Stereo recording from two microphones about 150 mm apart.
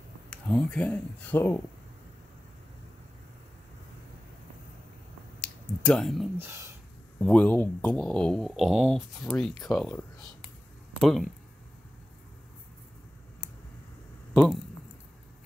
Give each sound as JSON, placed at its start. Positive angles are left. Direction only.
{"t": 0.3, "sound": "speech", "side_deg": 10}
{"t": 5.4, "sound": "a sound", "side_deg": 5}
{"t": 6.3, "sound": "speech", "side_deg": -15}
{"t": 7.2, "sound": "speech", "side_deg": 5}
{"t": 14.3, "sound": "speech", "side_deg": 10}